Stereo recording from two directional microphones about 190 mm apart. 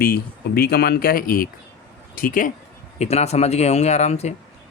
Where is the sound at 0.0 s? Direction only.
55° left (ahead or behind).